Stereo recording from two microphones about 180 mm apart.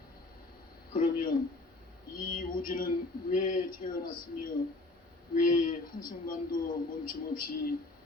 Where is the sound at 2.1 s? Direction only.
55° left (ahead or behind).